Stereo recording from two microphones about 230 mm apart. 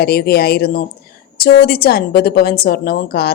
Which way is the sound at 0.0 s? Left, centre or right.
Left.